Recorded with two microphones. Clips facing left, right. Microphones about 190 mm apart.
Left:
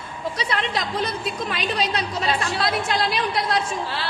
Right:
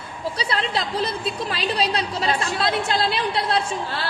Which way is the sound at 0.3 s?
30° right (ahead or behind).